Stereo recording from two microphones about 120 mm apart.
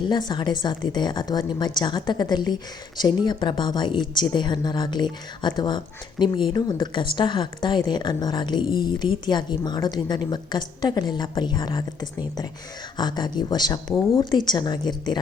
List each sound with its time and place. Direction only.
0.1 s a woman's voice: 40° left (ahead or behind)